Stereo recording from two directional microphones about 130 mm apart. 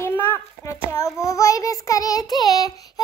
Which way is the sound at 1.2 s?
25° left (ahead or behind).